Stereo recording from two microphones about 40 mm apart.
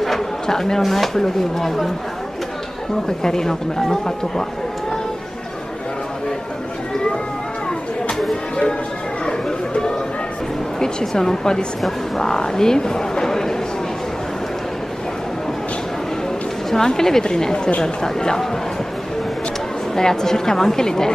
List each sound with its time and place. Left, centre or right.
0.0 s speech: centre
3.2 s speech: centre
10.8 s speech: centre
16.7 s speech: centre
20.0 s speech: centre